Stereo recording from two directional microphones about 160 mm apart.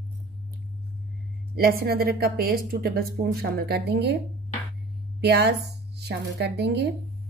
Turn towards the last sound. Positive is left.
turn(degrees=-90)